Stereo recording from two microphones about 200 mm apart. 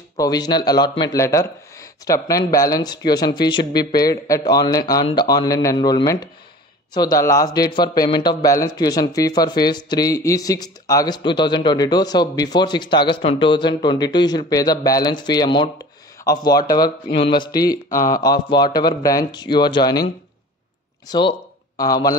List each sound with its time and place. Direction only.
0.2 s speech: 20° left (ahead or behind)
17.8 s speech: 45° left (ahead or behind)
18.1 s speech: 20° left (ahead or behind)
21.1 s speech: 20° left (ahead or behind)